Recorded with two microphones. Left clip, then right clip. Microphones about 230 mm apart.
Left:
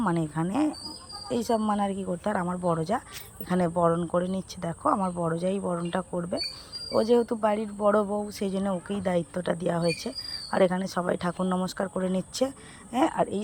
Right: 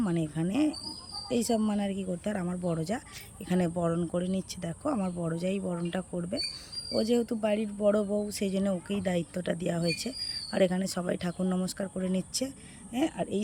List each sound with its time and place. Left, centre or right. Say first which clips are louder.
0.4 s speech: right 1 dB; centre
13.0 s speech: left 7 dB; left